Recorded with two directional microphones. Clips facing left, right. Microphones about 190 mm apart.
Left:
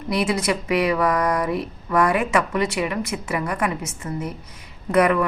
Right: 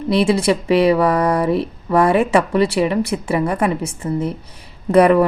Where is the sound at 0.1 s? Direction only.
30° right (ahead or behind).